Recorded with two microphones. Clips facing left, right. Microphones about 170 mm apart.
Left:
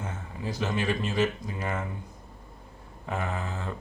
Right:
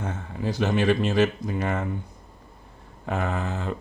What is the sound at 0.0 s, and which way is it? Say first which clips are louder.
Speech: right 6 dB; 70° right (ahead or behind).